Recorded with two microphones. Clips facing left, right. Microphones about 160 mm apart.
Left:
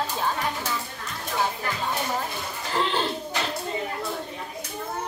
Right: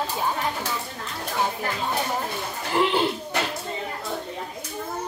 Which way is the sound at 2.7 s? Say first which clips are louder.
Right 4 dB; 15° right (ahead or behind).